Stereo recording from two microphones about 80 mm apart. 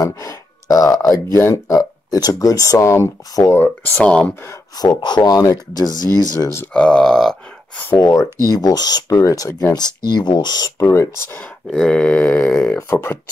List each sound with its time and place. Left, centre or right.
0.0 s speech: left
3.5 s grunt: left
4.7 s speech: left
6.7 s speech: centre
8.0 s speech: left
9.8 s speech: left
10.8 s speech: left
11.7 s grunt: centre
12.7 s speech: left